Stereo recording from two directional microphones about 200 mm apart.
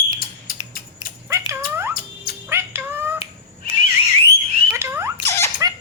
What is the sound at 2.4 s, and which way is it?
Music, 10° right (ahead or behind).